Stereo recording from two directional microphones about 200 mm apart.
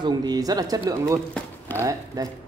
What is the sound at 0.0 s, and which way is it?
Speech, 20° right (ahead or behind).